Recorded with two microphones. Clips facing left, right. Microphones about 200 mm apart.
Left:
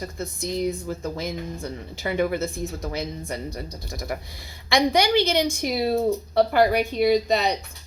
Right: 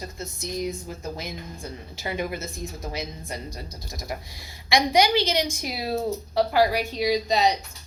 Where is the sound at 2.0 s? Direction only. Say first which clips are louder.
Left 6 dB; 60° left (ahead or behind).